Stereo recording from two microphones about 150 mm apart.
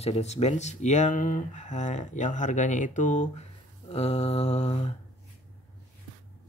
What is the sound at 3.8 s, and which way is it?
Speech, 45° left (ahead or behind).